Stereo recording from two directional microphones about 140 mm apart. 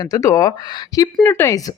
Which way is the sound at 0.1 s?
25° left (ahead or behind).